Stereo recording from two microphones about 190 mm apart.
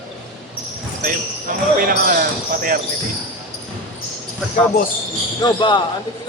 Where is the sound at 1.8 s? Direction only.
50° right (ahead or behind).